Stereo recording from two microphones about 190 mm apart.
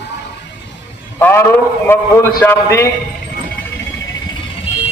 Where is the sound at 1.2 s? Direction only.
10° left (ahead or behind).